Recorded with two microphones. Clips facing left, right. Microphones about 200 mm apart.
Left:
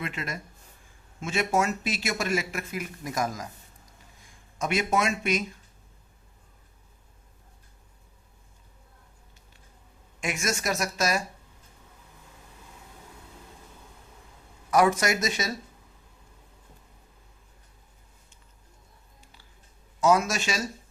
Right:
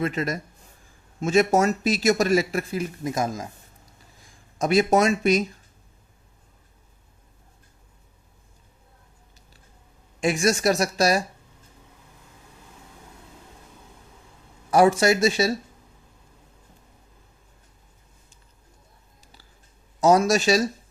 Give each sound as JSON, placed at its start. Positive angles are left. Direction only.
{"t": 0.0, "sound": "speech", "side_deg": -40}
{"t": 4.5, "sound": "speech", "side_deg": -35}
{"t": 10.2, "sound": "speech", "side_deg": -35}
{"t": 14.7, "sound": "speech", "side_deg": -30}
{"t": 19.2, "sound": "a sound", "side_deg": -40}
{"t": 20.0, "sound": "speech", "side_deg": -35}